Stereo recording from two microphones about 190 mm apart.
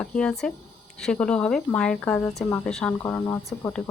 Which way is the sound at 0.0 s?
5° left (ahead or behind).